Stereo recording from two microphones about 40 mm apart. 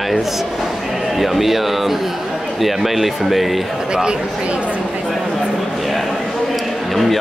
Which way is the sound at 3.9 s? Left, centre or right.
Right.